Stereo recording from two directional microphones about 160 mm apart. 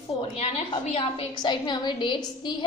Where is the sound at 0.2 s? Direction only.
35° left (ahead or behind).